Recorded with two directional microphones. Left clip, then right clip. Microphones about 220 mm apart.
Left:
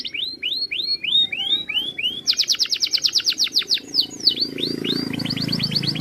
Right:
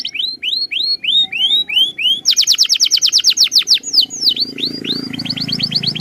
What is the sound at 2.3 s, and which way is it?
Chirp, 30° right (ahead or behind).